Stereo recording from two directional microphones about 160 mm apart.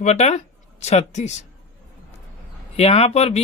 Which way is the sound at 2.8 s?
40° left (ahead or behind).